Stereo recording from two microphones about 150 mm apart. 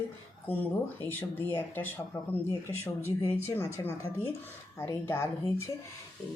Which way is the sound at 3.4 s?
15° left (ahead or behind).